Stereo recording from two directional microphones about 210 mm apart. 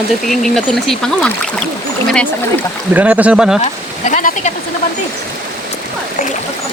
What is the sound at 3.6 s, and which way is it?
Speech, 35° left (ahead or behind).